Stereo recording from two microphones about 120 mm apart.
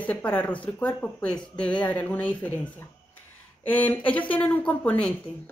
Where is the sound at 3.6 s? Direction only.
15° left (ahead or behind).